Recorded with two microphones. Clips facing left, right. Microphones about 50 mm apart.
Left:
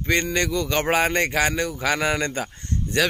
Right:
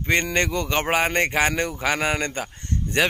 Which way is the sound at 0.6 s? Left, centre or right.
Centre.